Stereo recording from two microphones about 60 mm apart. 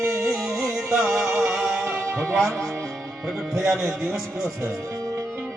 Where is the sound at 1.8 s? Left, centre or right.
Right.